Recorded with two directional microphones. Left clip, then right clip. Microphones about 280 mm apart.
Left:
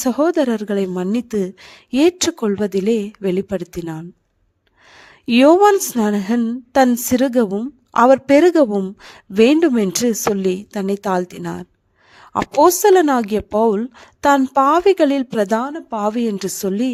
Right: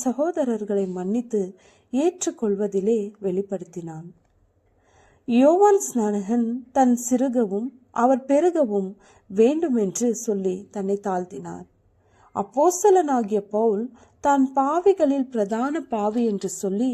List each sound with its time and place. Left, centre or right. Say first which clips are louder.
0.0 s a woman's voice: left 7 dB; left
2.4 s speech: left 4 dB; left
2.7 s a woman's voice: left 4 dB; left
5.2 s a woman's voice: left 6 dB; left
12.8 s a woman's voice: left 5 dB; left
15.9 s speech: left 6 dB; left
16.1 s a woman's voice: left 3 dB; left